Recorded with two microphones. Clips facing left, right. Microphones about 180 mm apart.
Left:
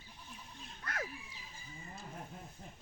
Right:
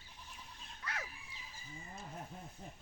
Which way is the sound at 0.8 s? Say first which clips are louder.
Left 4 dB; 50° left (ahead or behind).